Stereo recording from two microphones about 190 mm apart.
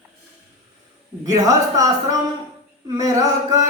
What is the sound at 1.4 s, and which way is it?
Speech, 20° right (ahead or behind).